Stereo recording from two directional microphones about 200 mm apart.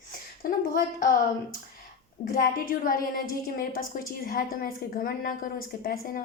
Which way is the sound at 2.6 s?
45° left (ahead or behind).